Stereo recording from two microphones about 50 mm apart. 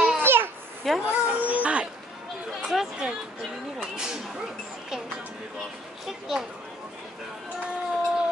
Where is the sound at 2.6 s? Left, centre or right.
Centre.